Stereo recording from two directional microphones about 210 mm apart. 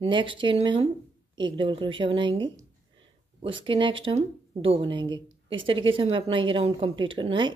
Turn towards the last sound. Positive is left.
turn(degrees=-25)  # may be behind; listen again after turning